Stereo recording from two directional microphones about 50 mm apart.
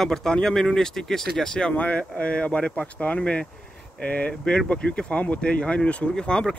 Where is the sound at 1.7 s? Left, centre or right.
Left.